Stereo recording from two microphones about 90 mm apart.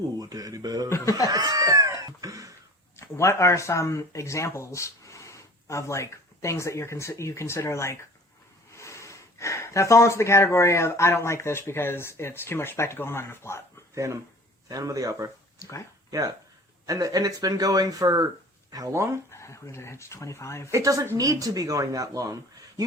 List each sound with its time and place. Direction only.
0.2 s speech: 45° right (ahead or behind)
0.9 s speech: 30° left (ahead or behind)
1.3 s cat: 45° right (ahead or behind)
3.0 s speech: 30° left (ahead or behind)
13.9 s speech: 35° right (ahead or behind)
15.5 s speech: 35° left (ahead or behind)
16.8 s speech: 40° right (ahead or behind)
19.3 s speech: 30° left (ahead or behind)
20.7 s speech: 35° right (ahead or behind)